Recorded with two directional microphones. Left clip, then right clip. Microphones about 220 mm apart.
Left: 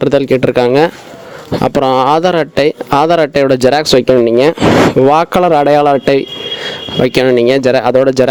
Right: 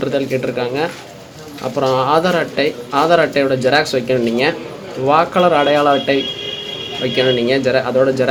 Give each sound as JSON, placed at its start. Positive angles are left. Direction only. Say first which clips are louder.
{"t": 0.0, "sound": "speech", "louder": "left 8 dB", "side_deg": 50}